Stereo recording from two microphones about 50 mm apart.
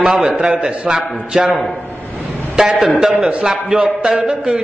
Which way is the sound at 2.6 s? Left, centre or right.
Centre.